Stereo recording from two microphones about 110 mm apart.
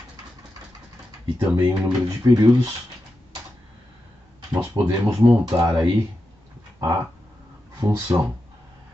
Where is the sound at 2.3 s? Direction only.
35° right (ahead or behind).